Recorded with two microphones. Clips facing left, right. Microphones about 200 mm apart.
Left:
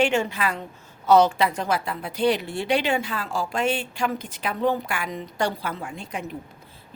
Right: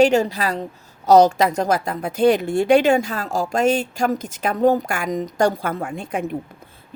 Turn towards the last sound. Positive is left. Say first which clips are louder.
# right 8 dB
turn(degrees=-55)  # may be behind; listen again after turning